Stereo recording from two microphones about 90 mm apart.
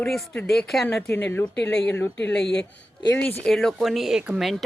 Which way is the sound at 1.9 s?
20° left (ahead or behind).